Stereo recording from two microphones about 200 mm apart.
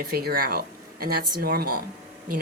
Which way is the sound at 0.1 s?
50° right (ahead or behind).